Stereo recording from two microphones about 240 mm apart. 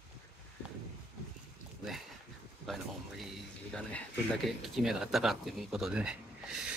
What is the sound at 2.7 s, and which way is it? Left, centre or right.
Speech, centre.